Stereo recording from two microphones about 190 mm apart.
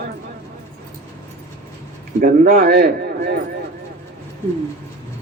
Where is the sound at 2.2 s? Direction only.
50° right (ahead or behind).